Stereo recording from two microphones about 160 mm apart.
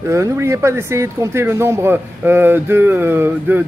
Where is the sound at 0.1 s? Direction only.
20° right (ahead or behind).